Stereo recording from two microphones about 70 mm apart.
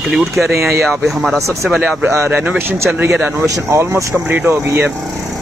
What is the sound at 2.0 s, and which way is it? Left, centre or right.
Speech, right.